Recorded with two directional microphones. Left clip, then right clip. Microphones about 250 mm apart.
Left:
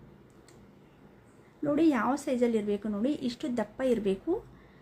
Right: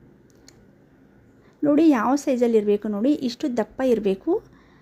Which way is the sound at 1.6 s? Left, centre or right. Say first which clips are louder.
Right 8 dB; right.